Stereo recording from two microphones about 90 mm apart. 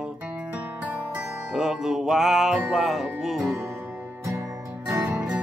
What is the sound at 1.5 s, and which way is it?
Music, 5° right (ahead or behind).